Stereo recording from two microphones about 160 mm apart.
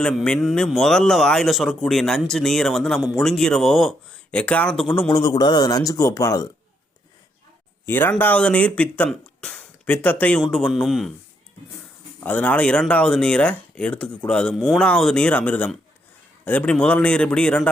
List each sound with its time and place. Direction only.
0.0 s speech: 5° left (ahead or behind)
5.0 s speech: 20° left (ahead or behind)
7.9 s speech: 15° left (ahead or behind)
12.2 s speech: 10° left (ahead or behind)